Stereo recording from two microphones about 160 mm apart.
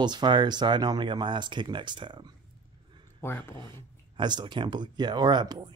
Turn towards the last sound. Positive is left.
turn(degrees=-30)  # may be behind; listen again after turning